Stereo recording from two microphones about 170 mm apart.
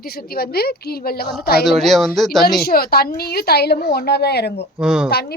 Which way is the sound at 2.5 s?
65° left (ahead or behind).